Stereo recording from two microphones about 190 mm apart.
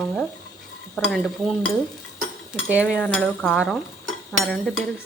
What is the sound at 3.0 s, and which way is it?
Speech, 5° left (ahead or behind).